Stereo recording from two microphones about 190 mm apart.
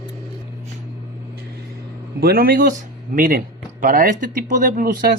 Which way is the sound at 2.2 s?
50° right (ahead or behind).